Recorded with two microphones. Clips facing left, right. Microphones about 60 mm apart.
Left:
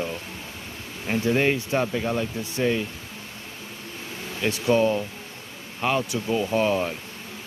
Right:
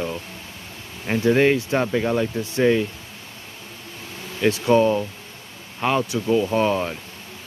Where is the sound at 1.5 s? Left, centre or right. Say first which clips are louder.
Right 4 dB; right.